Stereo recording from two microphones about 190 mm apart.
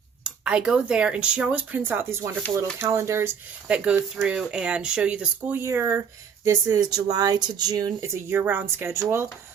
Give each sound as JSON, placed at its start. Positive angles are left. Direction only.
{"t": 0.3, "sound": "speech", "side_deg": -5}